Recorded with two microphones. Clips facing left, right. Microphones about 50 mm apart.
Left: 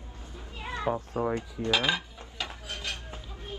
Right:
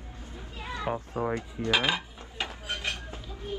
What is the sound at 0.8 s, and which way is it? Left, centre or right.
Speech, right.